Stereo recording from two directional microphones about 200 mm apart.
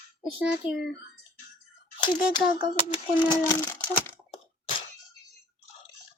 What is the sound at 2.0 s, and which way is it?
Speech, 20° left (ahead or behind).